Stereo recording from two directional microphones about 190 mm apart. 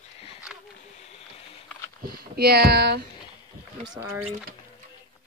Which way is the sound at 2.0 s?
55° right (ahead or behind).